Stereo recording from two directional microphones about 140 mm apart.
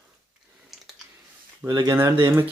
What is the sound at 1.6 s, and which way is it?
Speech, 30° right (ahead or behind).